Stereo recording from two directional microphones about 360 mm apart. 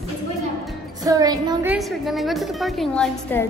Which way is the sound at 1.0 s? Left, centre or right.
Centre.